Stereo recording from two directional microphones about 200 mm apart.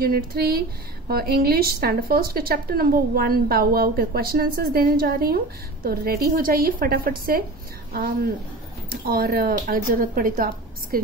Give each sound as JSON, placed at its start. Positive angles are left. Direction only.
{"t": 0.0, "sound": "a woman's voice", "side_deg": -50}